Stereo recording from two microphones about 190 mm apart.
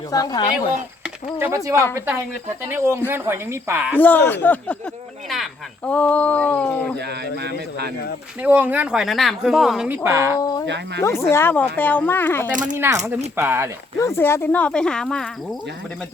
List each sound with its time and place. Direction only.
0.1 s speech: 20° left (ahead or behind)
1.0 s speech: 10° right (ahead or behind)
3.9 s speech: 10° left (ahead or behind)
8.4 s speech: 10° right (ahead or behind)
11.0 s speech: 15° left (ahead or behind)
12.7 s speech: 10° right (ahead or behind)
14.0 s speech: 15° left (ahead or behind)